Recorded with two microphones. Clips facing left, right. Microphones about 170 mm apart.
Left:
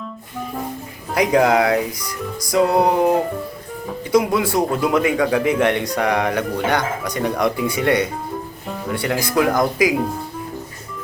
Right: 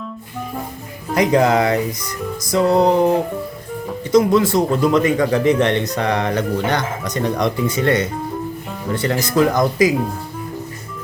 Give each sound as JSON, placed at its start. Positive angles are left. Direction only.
{"t": 1.1, "sound": "speech", "side_deg": 5}